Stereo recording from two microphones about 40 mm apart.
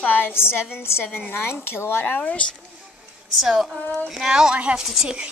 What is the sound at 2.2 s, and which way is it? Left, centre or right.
Speech, left.